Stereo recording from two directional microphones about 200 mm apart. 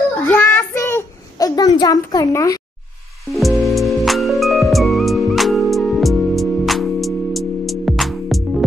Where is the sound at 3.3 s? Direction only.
Centre (ahead or behind).